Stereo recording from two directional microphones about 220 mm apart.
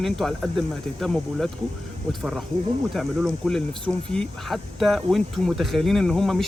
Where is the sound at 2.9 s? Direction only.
Centre (ahead or behind).